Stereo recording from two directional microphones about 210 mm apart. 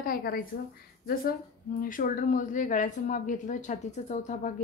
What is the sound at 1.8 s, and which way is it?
Speech, 40° left (ahead or behind).